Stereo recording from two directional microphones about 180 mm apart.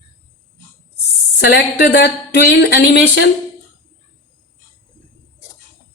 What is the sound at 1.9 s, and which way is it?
Speech, 65° left (ahead or behind).